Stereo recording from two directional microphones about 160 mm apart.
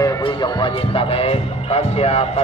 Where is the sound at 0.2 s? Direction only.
30° left (ahead or behind).